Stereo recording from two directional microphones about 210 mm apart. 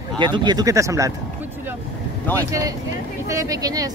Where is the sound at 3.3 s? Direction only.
15° right (ahead or behind).